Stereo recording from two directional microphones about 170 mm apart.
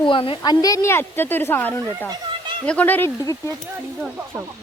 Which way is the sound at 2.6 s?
10° left (ahead or behind).